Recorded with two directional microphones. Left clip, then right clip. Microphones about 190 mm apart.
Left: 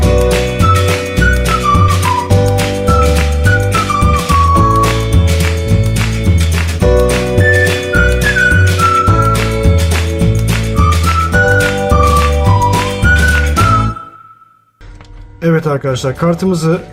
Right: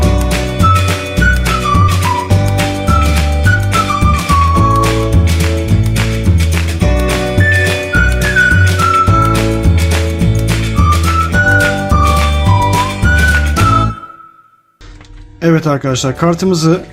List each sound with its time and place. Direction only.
0.0 s music: centre (ahead or behind)
6.8 s music: centre (ahead or behind)
11.3 s music: centre (ahead or behind)
15.4 s speech: 45° right (ahead or behind)